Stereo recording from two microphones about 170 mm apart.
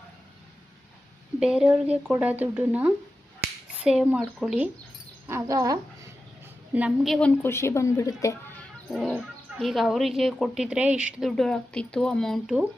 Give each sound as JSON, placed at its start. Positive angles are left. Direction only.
{"t": 1.4, "sound": "speech", "side_deg": -5}
{"t": 5.3, "sound": "speech", "side_deg": -20}
{"t": 6.7, "sound": "a woman's voice", "side_deg": -5}
{"t": 8.9, "sound": "speech", "side_deg": 0}